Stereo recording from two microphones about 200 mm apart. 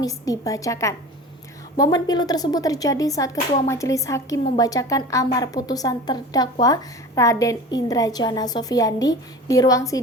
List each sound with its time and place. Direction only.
0.0 s speech: 15° left (ahead or behind)